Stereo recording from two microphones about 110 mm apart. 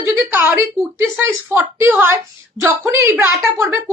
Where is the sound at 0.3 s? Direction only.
15° right (ahead or behind).